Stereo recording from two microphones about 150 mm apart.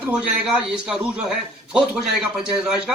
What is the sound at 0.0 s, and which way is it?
A man's voice, 5° right (ahead or behind).